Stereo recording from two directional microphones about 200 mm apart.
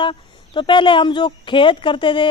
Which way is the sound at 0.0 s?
25° left (ahead or behind).